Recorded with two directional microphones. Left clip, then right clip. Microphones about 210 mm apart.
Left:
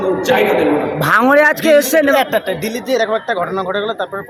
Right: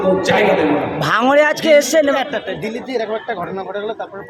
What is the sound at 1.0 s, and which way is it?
Speech, 25° left (ahead or behind).